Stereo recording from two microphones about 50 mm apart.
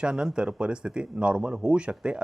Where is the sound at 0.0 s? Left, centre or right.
Centre.